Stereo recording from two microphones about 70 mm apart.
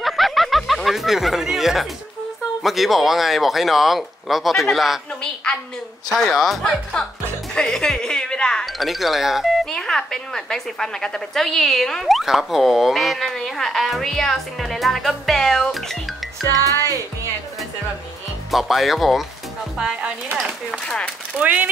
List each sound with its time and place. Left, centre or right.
0.0 s snicker: centre
2.6 s a woman's voice: centre
6.1 s speech: centre
8.7 s a woman's voice: centre
9.7 s a woman's voice: centre
18.5 s a woman's voice: centre
19.8 s speech: centre
20.8 s speech: centre
21.4 s speech: right